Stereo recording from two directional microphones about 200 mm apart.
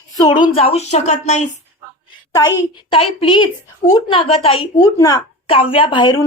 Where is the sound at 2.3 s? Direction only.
20° left (ahead or behind).